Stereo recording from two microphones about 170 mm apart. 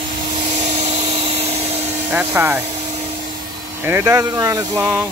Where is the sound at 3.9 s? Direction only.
15° right (ahead or behind).